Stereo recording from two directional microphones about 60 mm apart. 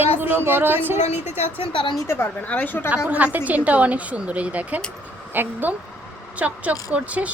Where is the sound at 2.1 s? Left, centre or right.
Left.